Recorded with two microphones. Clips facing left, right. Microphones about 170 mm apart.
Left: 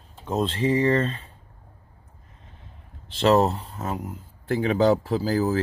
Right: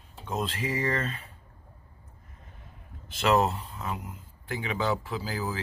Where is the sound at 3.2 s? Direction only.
35° left (ahead or behind).